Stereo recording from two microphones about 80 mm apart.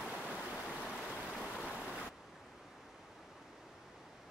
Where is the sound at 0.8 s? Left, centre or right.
Centre.